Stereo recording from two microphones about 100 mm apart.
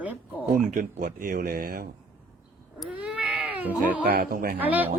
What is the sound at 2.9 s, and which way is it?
Cat, 15° right (ahead or behind).